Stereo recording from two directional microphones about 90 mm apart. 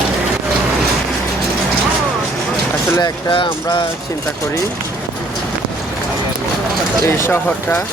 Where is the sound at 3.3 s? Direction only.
70° left (ahead or behind).